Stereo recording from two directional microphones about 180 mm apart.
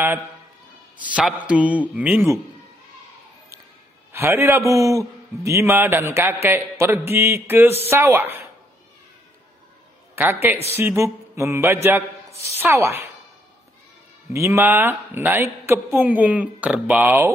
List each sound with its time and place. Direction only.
0.9 s a man's voice: 5° right (ahead or behind)
4.1 s a man's voice: 15° right (ahead or behind)
10.1 s a man's voice: 10° right (ahead or behind)
12.3 s a sound: 35° left (ahead or behind)
12.5 s a man's voice: 15° right (ahead or behind)
14.3 s a man's voice: 15° right (ahead or behind)